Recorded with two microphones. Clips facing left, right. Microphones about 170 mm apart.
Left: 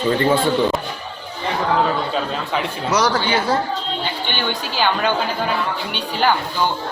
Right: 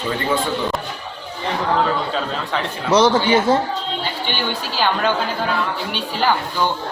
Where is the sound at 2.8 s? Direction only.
25° right (ahead or behind).